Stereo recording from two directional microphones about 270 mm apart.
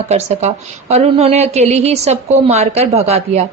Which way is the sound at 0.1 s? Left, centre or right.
Right.